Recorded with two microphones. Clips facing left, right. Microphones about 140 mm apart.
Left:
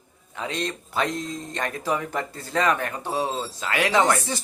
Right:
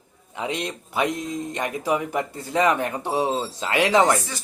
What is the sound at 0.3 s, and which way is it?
Speech, 15° right (ahead or behind).